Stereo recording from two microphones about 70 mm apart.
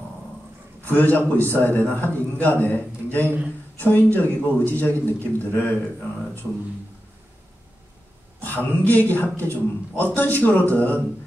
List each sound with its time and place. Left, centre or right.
0.8 s a man's voice: left
8.5 s a man's voice: left